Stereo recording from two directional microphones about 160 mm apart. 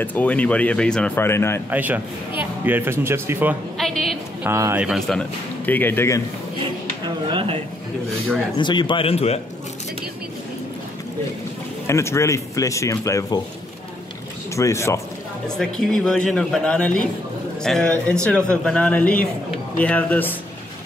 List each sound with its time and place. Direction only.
0.0 s speech: 10° left (ahead or behind)
1.7 s speech: 10° right (ahead or behind)
3.7 s a sound: centre (ahead or behind)
4.4 s speech: 15° right (ahead or behind)
4.8 s speech: centre (ahead or behind)
5.7 s speech: 10° left (ahead or behind)
7.2 s a sound: 35° right (ahead or behind)
8.5 s a man's voice: 30° left (ahead or behind)
11.9 s speech: 15° left (ahead or behind)
14.5 s speech: 20° left (ahead or behind)
15.4 s speech: 5° left (ahead or behind)